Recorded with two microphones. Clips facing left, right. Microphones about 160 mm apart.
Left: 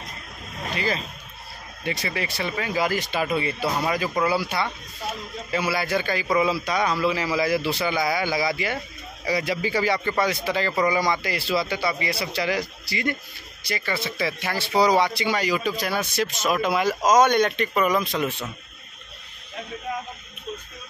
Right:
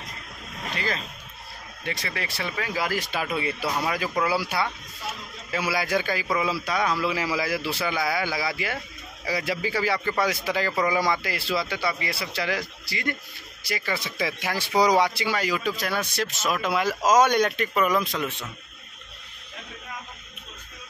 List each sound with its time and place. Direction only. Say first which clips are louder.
0.7 s speech: left 4 dB; 5° left (ahead or behind)
6.2 s speech: left 4 dB; 5° left (ahead or behind)